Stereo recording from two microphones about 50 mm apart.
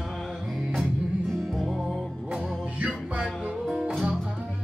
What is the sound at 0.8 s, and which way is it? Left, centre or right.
Music, centre.